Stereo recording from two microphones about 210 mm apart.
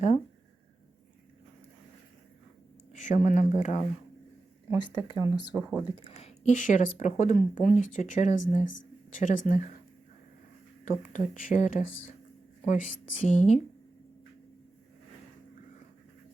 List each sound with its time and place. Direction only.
2.9 s speech: 35° left (ahead or behind)
4.8 s speech: 20° left (ahead or behind); by 9.7 s 40° left (ahead or behind)
10.8 s speech: 35° left (ahead or behind)